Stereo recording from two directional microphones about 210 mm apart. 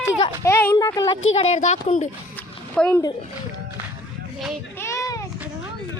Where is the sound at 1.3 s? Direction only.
30° left (ahead or behind).